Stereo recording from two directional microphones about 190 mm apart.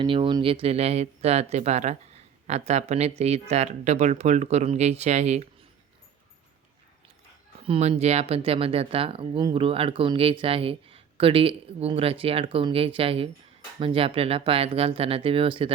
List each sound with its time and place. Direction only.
0.0 s speech: 25° right (ahead or behind)
7.7 s speech: 35° right (ahead or behind)